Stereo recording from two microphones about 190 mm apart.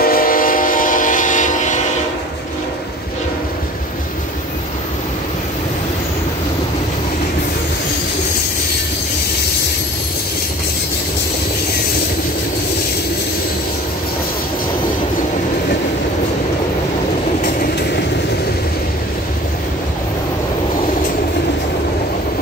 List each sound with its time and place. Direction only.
0.0 s train: 50° left (ahead or behind)
17.6 s train: 60° left (ahead or behind)